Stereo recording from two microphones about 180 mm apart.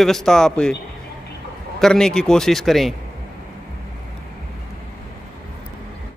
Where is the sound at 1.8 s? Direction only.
5° left (ahead or behind).